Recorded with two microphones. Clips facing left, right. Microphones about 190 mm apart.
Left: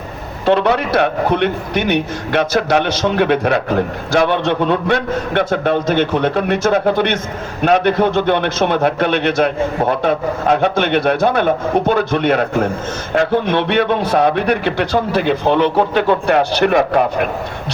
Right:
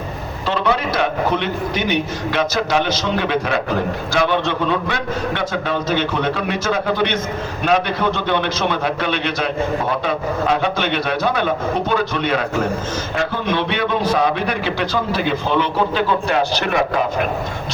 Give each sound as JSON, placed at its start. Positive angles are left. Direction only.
{"t": 0.4, "sound": "a man's voice", "side_deg": 60}